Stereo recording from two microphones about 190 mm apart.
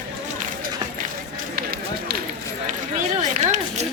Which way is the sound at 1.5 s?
50° right (ahead or behind).